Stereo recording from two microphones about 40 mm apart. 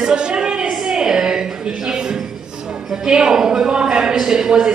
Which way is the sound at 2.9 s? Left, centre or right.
Centre.